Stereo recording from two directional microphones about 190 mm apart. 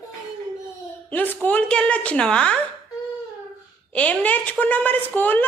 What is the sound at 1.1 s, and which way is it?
A woman's voice, 10° left (ahead or behind).